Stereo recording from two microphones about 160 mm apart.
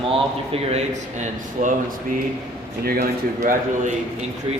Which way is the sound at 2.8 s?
75° right (ahead or behind).